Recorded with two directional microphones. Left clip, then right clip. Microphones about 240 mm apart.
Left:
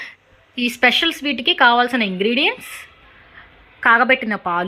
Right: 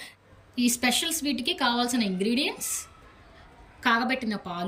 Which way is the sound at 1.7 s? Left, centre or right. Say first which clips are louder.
Left 11 dB; centre.